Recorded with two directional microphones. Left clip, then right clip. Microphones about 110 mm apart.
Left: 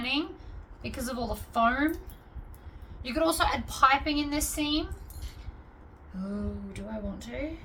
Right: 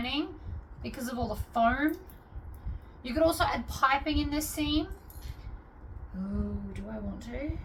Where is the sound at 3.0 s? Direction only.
45° left (ahead or behind).